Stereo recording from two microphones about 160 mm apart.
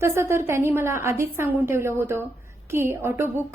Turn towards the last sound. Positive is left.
turn(degrees=-15)  # may be behind; listen again after turning